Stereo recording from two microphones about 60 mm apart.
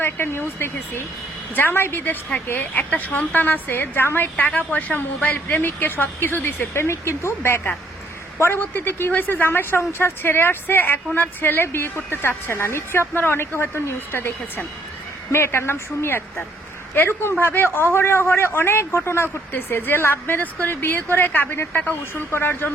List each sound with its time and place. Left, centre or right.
0.0 s a woman's voice: left
4.4 s a woman's voice: left
22.3 s a woman's voice: left